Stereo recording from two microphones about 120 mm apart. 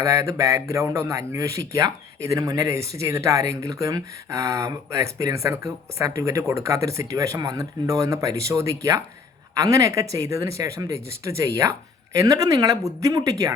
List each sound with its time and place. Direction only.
0.0 s speech: 25° right (ahead or behind)